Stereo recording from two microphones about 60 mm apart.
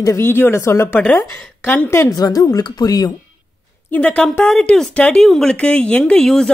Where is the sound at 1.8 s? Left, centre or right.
Left.